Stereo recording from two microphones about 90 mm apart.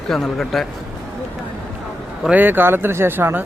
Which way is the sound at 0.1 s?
Centre (ahead or behind).